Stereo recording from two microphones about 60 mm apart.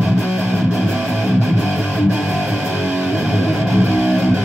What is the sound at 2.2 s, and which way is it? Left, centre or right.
Music, centre.